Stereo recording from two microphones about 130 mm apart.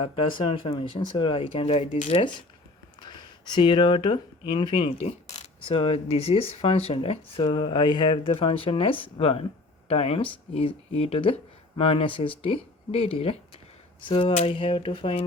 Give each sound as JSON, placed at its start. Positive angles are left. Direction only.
{"t": 0.0, "sound": "speech", "side_deg": 40}
{"t": 3.0, "sound": "speech", "side_deg": 35}